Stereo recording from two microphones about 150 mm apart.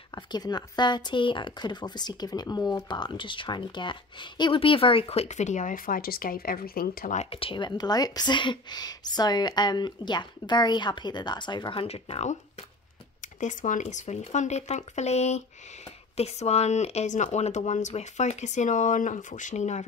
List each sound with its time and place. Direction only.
0.1 s speech: 25° left (ahead or behind); by 7.2 s 75° left (ahead or behind)
7.2 s a woman's voice: 40° left (ahead or behind)
13.2 s speech: 55° left (ahead or behind)